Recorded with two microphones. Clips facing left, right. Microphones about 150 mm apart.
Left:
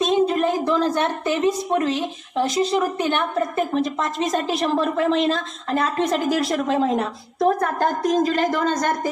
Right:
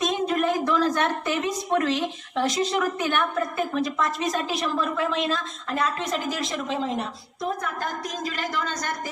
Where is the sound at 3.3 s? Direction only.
40° left (ahead or behind).